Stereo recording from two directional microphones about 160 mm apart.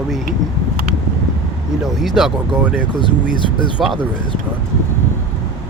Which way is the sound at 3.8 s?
Centre (ahead or behind).